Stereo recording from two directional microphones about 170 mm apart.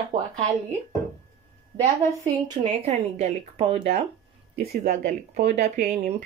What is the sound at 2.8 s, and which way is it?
A woman's voice, 40° right (ahead or behind).